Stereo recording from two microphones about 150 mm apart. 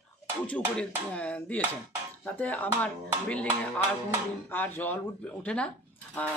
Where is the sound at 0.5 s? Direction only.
10° left (ahead or behind).